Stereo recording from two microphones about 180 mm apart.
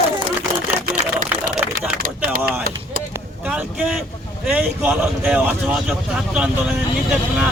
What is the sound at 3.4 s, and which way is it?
A man's voice, 5° right (ahead or behind).